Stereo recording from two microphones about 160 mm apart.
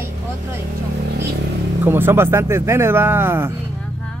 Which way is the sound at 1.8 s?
15° right (ahead or behind).